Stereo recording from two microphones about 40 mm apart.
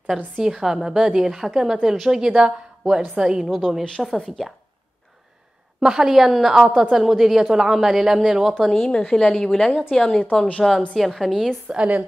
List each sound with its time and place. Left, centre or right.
0.4 s a woman's voice: centre
3.4 s speech: centre
5.8 s a woman's voice: centre
8.4 s speech: centre
8.7 s a woman's voice: centre
11.7 s a woman's voice: right